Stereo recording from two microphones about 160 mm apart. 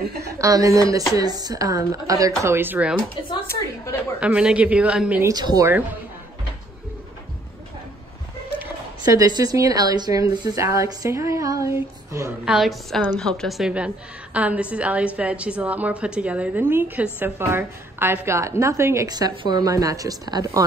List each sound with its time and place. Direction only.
0.4 s a woman's voice: 20° right (ahead or behind)
3.4 s a woman's voice: 20° left (ahead or behind)
4.2 s a woman's voice: 5° right (ahead or behind)
5.2 s a woman's voice: 25° right (ahead or behind)
9.1 s a woman's voice: 20° right (ahead or behind)
12.4 s a woman's voice: centre (ahead or behind); by 20.6 s 25° right (ahead or behind)